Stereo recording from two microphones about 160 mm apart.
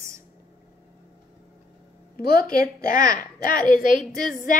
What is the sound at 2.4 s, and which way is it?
Speech, 60° left (ahead or behind).